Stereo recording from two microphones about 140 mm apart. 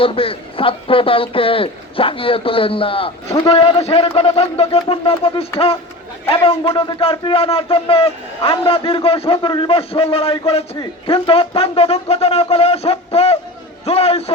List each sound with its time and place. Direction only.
0.0 s a man's voice: 40° left (ahead or behind)